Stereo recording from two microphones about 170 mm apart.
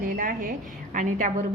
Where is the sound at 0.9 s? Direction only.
50° right (ahead or behind).